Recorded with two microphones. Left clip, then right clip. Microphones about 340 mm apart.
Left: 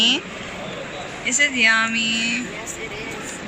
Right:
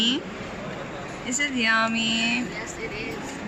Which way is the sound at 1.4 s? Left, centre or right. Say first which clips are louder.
Left 6 dB; centre.